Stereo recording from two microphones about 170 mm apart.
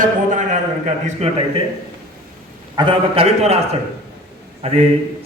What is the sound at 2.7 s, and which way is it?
A man's voice, 30° right (ahead or behind).